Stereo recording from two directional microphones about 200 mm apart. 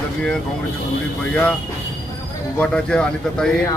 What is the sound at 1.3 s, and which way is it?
Speech, 5° left (ahead or behind).